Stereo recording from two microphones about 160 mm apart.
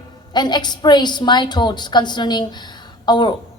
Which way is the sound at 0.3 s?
25° left (ahead or behind).